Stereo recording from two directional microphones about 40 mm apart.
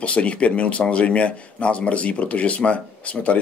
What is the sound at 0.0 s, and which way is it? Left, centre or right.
Speech, left.